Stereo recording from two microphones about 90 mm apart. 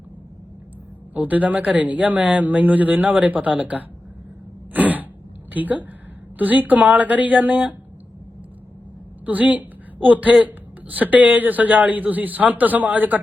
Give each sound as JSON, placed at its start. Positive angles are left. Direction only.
{"t": 1.1, "sound": "a man's voice", "side_deg": -15}
{"t": 4.7, "sound": "throat clearing", "side_deg": -20}
{"t": 5.5, "sound": "a man's voice", "side_deg": -20}
{"t": 9.2, "sound": "a woman's voice", "side_deg": -15}